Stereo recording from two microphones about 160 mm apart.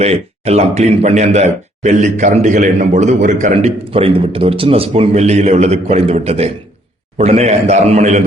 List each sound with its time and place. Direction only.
0.0 s speech: 40° right (ahead or behind)
3.9 s a man's voice: 35° right (ahead or behind)